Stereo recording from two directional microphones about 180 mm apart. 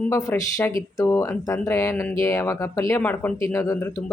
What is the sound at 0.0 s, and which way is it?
Speech, 15° left (ahead or behind).